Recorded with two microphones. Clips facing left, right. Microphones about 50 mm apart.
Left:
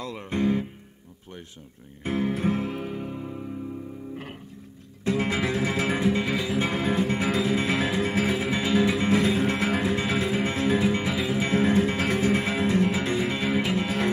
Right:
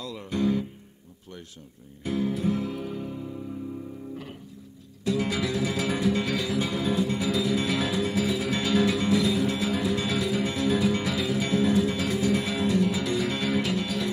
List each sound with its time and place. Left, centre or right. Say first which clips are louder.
0.0 s music: left 1 dB; left
2.0 s music: left 1 dB; left
5.0 s music: left 1 dB; left
6.6 s music: left 1 dB; left
8.5 s music: left 1 dB; left